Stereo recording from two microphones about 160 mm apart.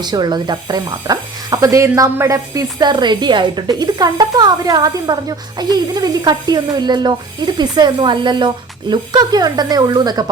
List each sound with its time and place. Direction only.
0.0 s speech: 25° right (ahead or behind)